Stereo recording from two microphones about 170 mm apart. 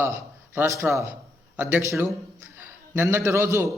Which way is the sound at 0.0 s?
15° right (ahead or behind).